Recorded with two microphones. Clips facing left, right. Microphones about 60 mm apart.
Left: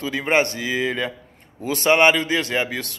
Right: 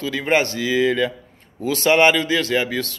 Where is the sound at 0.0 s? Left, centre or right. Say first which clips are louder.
Right 1 dB; left.